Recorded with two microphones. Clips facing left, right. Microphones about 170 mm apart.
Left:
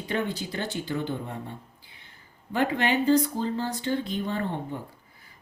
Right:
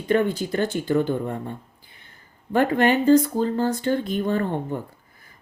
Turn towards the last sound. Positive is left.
turn(degrees=-50)  # may be behind; listen again after turning